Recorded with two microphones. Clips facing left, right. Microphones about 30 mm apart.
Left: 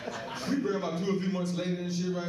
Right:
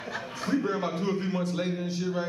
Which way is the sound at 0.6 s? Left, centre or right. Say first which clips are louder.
Right 3 dB; centre.